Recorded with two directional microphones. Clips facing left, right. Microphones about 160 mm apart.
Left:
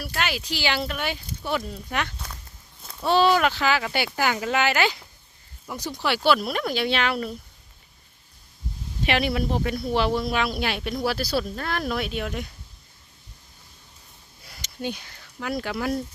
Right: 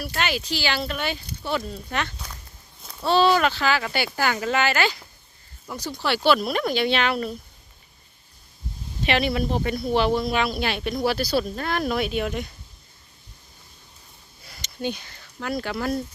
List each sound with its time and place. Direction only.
0.0 s speech: 5° left (ahead or behind)
6.2 s speech: 5° left (ahead or behind)
9.0 s speech: 5° left (ahead or behind)
14.5 s speech: 10° left (ahead or behind)